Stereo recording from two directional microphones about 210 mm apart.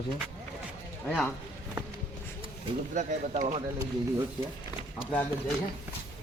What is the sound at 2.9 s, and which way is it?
Speech, 40° right (ahead or behind).